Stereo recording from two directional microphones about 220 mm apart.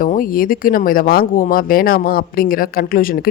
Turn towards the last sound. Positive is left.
turn(degrees=40)  # may be behind; listen again after turning